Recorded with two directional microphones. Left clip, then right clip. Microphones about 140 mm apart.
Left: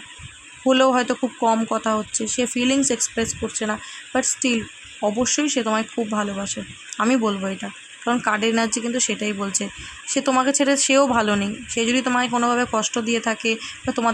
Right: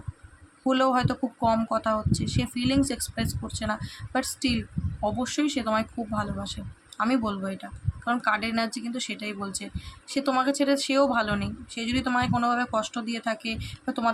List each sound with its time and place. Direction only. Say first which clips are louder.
0.6 s speech: left 6 dB; 40° left (ahead or behind)
5.3 s speech: left 5 dB; 45° left (ahead or behind)